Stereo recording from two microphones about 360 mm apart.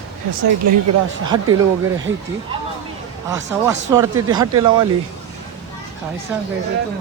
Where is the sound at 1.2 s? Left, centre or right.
Centre.